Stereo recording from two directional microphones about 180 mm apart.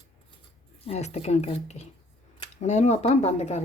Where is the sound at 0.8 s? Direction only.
35° left (ahead or behind).